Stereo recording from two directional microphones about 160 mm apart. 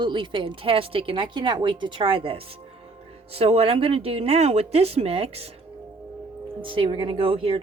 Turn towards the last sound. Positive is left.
turn(degrees=-35)  # may be behind; listen again after turning